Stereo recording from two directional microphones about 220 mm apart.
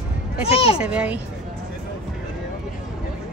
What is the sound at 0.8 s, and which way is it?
Speech, 5° right (ahead or behind).